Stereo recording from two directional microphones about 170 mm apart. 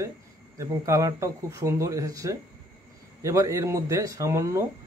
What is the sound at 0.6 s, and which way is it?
Speech, 20° right (ahead or behind).